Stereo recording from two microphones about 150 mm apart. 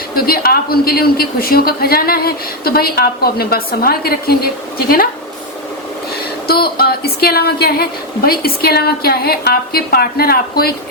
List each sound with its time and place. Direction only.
0.1 s a man's voice: 85° left
6.5 s a man's voice: 90° left